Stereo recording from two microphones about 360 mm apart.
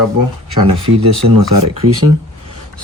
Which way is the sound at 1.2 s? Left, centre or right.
Right.